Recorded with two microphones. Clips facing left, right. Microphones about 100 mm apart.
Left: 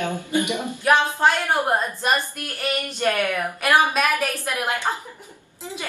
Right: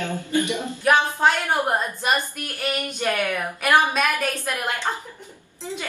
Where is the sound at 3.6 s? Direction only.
Centre (ahead or behind).